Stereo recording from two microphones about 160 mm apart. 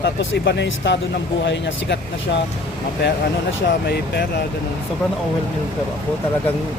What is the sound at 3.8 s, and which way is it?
Speech, 90° left.